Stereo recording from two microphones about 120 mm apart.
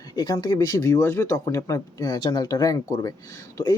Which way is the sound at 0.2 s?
35° left (ahead or behind).